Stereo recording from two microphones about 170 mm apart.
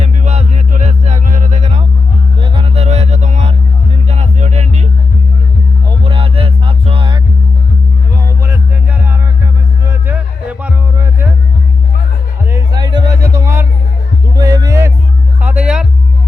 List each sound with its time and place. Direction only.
0.0 s music: 40° right (ahead or behind)
6.1 s music: 35° right (ahead or behind)
8.4 s music: 15° right (ahead or behind)
12.5 s music: 25° right (ahead or behind); by 15.9 s 5° right (ahead or behind)